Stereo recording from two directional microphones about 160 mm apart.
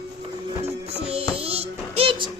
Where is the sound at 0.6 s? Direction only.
40° right (ahead or behind).